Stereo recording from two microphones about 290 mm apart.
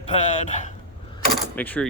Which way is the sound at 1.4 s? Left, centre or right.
Centre.